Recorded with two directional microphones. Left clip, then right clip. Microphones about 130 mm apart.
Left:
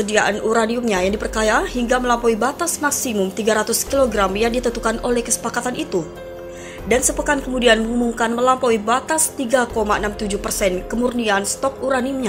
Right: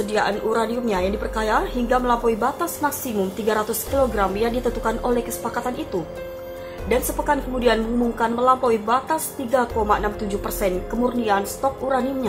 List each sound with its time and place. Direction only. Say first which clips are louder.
0.1 s a woman's voice: left 4 dB; 25° left (ahead or behind)